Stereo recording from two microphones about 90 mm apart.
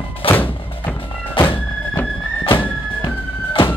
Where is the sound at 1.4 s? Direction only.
75° left (ahead or behind).